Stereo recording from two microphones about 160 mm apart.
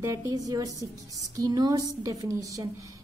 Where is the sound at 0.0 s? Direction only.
20° right (ahead or behind).